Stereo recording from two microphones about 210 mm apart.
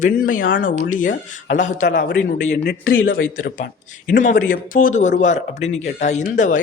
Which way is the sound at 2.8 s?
75° left (ahead or behind).